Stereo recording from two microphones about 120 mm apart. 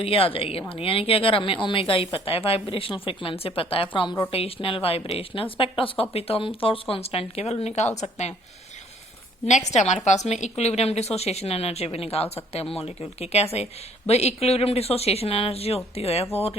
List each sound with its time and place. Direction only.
0.0 s a woman's voice: 50° left (ahead or behind); by 8.3 s 70° left (ahead or behind)
9.5 s a woman's voice: 75° left (ahead or behind); by 16.2 s 60° left (ahead or behind)